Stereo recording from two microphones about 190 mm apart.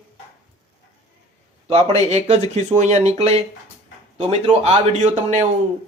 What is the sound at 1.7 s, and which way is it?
Speech, 35° right (ahead or behind).